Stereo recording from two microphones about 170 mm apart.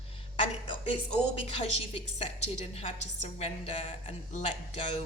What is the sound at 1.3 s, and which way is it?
A woman's voice, 35° left (ahead or behind).